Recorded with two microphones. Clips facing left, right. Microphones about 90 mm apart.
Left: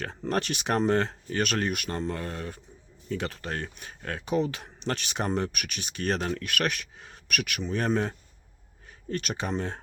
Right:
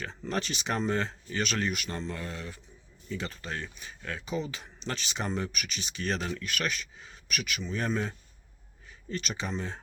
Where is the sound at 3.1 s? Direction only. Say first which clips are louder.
Left 4 dB; 60° left (ahead or behind).